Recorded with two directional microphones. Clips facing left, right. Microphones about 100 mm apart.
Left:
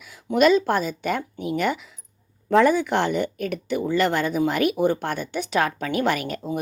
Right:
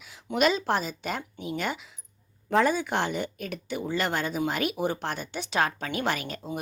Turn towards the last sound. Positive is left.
turn(degrees=55)  # may be behind; listen again after turning